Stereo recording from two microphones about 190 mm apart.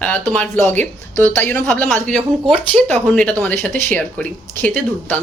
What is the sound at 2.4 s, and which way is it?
Speech, 30° right (ahead or behind).